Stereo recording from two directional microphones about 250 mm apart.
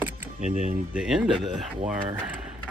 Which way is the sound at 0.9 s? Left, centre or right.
Centre.